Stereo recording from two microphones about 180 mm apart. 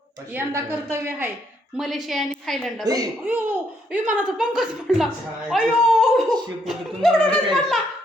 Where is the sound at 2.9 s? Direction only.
20° right (ahead or behind).